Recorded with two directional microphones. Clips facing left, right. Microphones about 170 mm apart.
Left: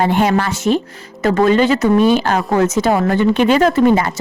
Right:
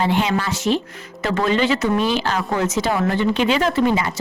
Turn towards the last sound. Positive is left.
turn(degrees=50)  # may be behind; listen again after turning